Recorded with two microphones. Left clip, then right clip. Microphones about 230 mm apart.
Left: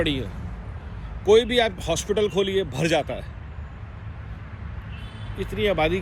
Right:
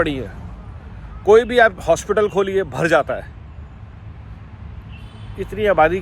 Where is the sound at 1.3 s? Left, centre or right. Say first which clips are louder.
Right 5 dB; right.